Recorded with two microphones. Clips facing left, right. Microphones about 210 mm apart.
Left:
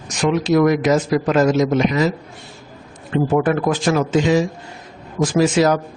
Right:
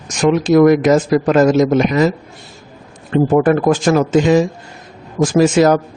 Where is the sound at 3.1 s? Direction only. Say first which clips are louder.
Right 5 dB; 45° right (ahead or behind).